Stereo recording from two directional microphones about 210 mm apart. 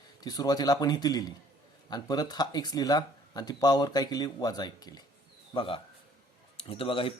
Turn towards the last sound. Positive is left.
turn(degrees=25)  # may be behind; listen again after turning